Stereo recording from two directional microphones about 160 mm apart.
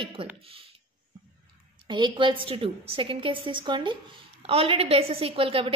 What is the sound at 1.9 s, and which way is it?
A woman's voice, 30° right (ahead or behind).